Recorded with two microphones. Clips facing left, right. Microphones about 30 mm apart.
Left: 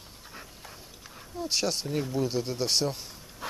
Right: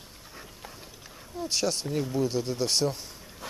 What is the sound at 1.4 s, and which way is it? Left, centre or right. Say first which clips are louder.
Speech: right 1 dB; centre.